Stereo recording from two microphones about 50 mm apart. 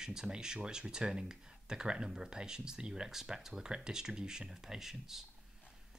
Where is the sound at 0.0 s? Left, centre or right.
Centre.